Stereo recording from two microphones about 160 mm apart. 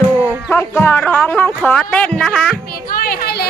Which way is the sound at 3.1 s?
80° left.